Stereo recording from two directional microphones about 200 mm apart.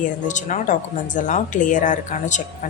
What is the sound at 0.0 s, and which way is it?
Speech, 40° left (ahead or behind).